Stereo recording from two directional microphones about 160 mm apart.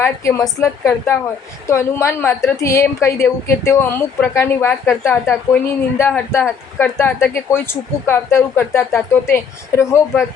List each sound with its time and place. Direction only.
0.0 s speech: 20° left (ahead or behind)